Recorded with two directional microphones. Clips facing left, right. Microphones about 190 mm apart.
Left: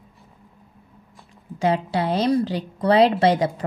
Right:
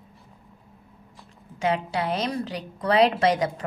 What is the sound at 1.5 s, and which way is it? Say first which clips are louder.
A woman's voice: left 4 dB; 35° left (ahead or behind).